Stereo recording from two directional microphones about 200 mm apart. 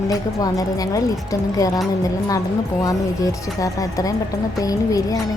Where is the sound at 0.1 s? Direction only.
15° left (ahead or behind).